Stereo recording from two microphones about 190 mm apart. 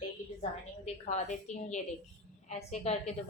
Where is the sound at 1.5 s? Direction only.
35° left (ahead or behind).